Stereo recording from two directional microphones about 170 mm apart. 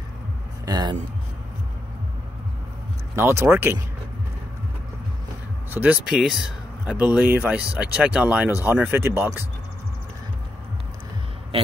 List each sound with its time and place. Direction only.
0.7 s speech: 25° right (ahead or behind)
3.2 s speech: 15° right (ahead or behind)
5.7 s speech: 10° right (ahead or behind)